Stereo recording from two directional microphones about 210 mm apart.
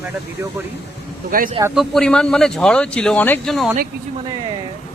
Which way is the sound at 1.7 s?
Centre (ahead or behind).